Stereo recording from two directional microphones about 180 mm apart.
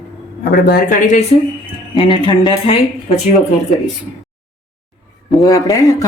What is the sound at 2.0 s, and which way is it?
Speech, 25° left (ahead or behind).